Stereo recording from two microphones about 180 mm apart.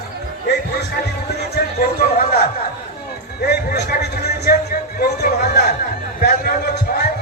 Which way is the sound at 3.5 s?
65° left (ahead or behind).